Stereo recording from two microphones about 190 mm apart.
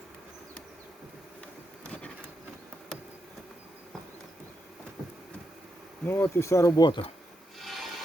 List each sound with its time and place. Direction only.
1.8 s bee: 5° left (ahead or behind)
6.1 s speech: 10° left (ahead or behind)
7.6 s a sound: centre (ahead or behind)